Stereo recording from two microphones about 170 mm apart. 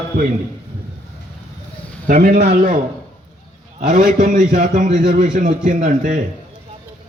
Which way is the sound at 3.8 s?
55° right (ahead or behind).